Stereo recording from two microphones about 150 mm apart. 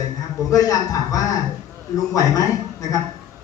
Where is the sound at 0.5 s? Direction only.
25° left (ahead or behind).